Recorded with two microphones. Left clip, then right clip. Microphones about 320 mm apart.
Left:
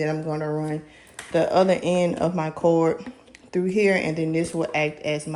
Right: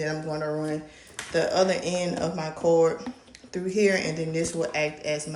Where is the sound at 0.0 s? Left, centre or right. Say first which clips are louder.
Left 3 dB; centre.